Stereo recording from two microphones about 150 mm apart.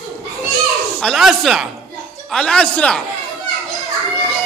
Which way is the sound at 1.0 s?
Centre (ahead or behind).